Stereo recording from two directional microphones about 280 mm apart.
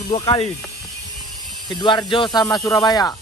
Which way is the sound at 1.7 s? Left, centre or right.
Centre.